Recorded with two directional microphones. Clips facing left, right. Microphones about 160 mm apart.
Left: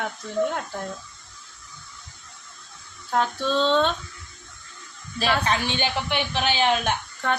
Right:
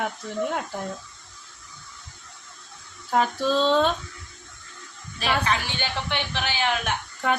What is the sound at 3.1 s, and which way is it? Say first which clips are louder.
Speech: right 1 dB; 5° right (ahead or behind).